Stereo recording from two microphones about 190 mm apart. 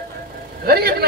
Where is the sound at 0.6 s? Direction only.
55° right (ahead or behind).